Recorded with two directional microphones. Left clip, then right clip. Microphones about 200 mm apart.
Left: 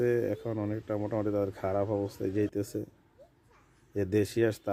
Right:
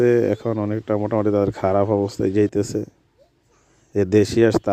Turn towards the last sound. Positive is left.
turn(degrees=-40)  # may be behind; listen again after turning